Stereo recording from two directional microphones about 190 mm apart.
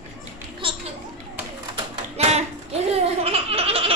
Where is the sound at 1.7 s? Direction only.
35° right (ahead or behind).